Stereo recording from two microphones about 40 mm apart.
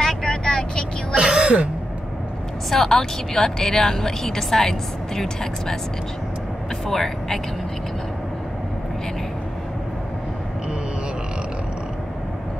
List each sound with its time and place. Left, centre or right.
0.0 s vehicle: centre
1.1 s throat clearing: right
2.7 s a woman's voice: centre
6.9 s a woman's voice: centre